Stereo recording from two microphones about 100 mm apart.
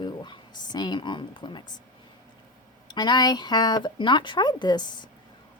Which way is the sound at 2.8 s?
45° left (ahead or behind).